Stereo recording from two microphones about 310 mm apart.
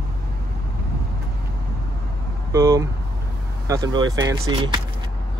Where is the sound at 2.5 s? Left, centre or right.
Centre.